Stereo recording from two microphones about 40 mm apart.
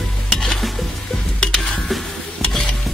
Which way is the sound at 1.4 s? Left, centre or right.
Centre.